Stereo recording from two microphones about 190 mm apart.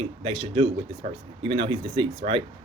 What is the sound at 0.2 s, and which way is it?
Speech, 30° right (ahead or behind).